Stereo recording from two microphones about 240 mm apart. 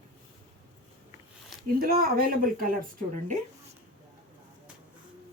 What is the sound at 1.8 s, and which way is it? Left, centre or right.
Speech, right.